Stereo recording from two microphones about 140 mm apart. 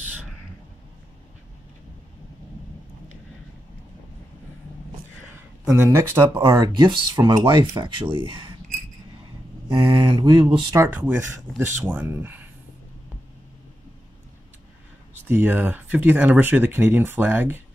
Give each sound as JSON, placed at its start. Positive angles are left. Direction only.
{"t": 5.9, "sound": "speech", "side_deg": -15}
{"t": 6.7, "sound": "speech", "side_deg": -35}
{"t": 9.7, "sound": "speech", "side_deg": -35}
{"t": 10.7, "sound": "speech", "side_deg": -15}
{"t": 15.2, "sound": "speech", "side_deg": -15}